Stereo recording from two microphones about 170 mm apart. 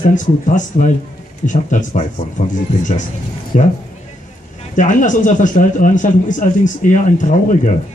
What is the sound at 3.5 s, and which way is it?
Speech, 50° left (ahead or behind).